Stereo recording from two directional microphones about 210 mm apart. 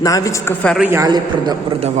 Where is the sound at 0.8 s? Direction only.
10° right (ahead or behind).